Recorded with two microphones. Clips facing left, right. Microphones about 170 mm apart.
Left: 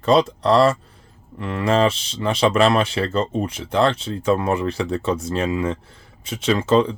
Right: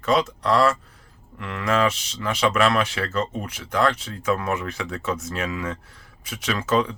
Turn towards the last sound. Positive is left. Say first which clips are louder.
# left 5 dB
turn(degrees=30)  # may be behind; listen again after turning